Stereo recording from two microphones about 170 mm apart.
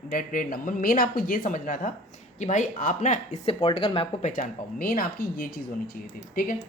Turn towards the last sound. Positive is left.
turn(degrees=55)  # may be behind; listen again after turning